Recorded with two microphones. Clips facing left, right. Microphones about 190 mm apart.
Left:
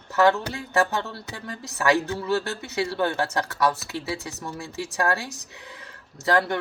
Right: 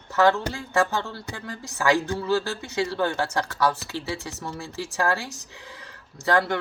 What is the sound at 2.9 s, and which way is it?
Speech, 25° left (ahead or behind).